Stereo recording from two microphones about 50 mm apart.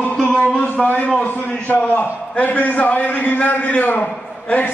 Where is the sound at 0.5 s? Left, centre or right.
Left.